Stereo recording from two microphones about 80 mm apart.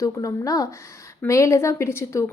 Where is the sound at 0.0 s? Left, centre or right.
Left.